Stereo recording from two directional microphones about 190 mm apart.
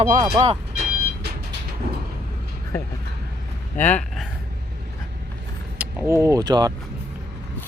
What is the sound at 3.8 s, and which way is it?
Speech, 5° left (ahead or behind).